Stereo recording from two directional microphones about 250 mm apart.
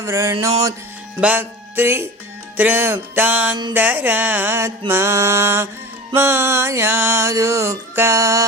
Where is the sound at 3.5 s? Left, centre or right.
Centre.